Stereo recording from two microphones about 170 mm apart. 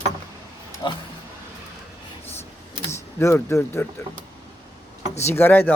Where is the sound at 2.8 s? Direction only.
15° left (ahead or behind).